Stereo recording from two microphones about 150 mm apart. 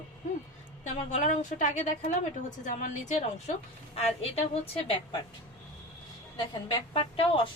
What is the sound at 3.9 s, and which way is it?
Speech, 45° left (ahead or behind).